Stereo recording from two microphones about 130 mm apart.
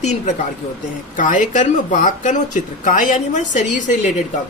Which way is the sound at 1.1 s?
75° left (ahead or behind).